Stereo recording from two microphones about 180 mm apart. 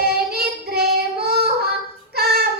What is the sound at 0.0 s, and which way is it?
Child singing, 60° right (ahead or behind).